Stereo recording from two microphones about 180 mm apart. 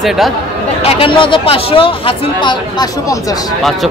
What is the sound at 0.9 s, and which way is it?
Speech, 30° left (ahead or behind).